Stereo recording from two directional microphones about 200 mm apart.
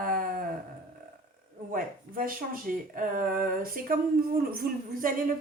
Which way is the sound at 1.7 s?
45° right (ahead or behind).